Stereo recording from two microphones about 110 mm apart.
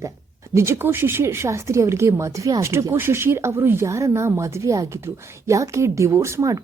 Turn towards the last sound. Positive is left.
turn(degrees=-30)  # may be behind; listen again after turning